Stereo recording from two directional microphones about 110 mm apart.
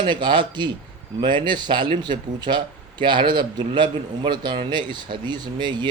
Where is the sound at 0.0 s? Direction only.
45° right (ahead or behind).